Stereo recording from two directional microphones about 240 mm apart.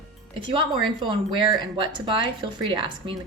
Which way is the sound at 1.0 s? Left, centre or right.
Centre.